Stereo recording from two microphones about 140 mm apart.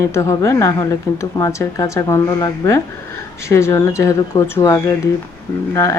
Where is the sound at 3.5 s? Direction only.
20° left (ahead or behind).